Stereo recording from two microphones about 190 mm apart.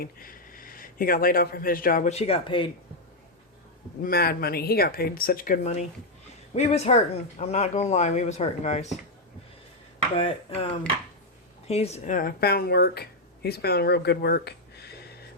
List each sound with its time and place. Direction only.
0.0 s a man's voice: 50° left (ahead or behind); by 2.6 s 30° left (ahead or behind)
4.0 s speech: 55° left (ahead or behind); by 8.9 s 35° left (ahead or behind)
10.2 s speech: 30° left (ahead or behind)
11.7 s speech: 35° left (ahead or behind); by 15.2 s 60° left (ahead or behind)